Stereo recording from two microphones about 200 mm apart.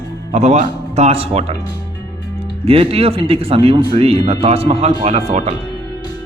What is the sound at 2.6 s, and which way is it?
Speech, 30° right (ahead or behind).